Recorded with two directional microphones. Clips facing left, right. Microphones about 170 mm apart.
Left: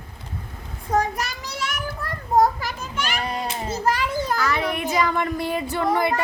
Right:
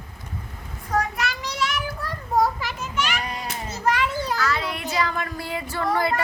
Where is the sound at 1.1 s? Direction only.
45° left (ahead or behind).